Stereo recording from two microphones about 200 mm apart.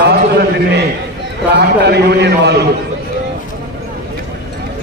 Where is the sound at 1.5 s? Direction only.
55° right (ahead or behind).